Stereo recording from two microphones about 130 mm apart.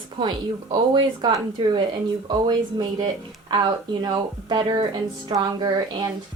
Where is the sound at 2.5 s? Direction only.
35° right (ahead or behind).